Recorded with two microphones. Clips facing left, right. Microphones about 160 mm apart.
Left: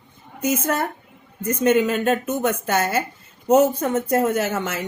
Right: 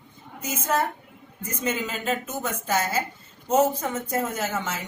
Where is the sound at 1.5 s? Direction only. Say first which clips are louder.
Left 11 dB; 65° left (ahead or behind).